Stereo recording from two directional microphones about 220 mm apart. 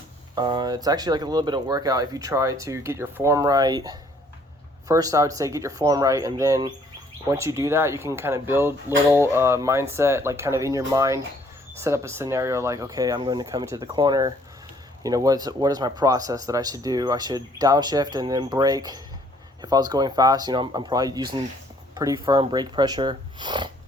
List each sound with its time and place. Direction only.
0.3 s speech: 20° right (ahead or behind)